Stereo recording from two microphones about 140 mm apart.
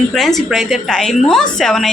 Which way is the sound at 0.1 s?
Centre (ahead or behind).